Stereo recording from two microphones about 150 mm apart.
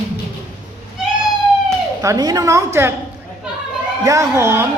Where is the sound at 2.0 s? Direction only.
25° right (ahead or behind).